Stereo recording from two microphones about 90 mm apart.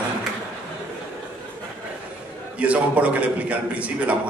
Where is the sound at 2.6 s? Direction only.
15° right (ahead or behind).